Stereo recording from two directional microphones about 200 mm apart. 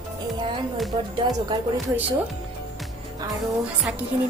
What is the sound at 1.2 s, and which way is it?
Speech, 25° right (ahead or behind).